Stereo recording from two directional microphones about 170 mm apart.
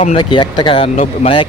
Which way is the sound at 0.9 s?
40° left (ahead or behind).